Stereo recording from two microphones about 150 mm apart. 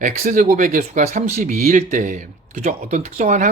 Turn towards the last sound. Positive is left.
turn(degrees=-55)  # may be behind; listen again after turning